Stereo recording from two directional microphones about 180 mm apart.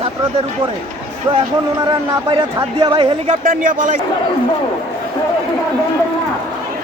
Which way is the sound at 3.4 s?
45° right (ahead or behind).